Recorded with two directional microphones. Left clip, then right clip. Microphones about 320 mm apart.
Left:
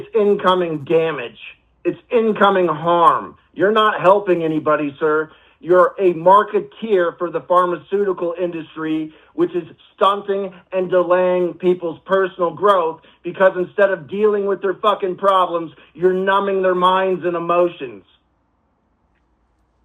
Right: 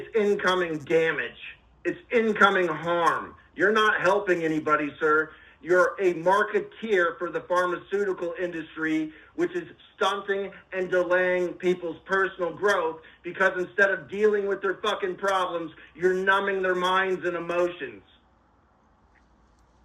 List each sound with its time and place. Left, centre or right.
0.0 s a man's voice: left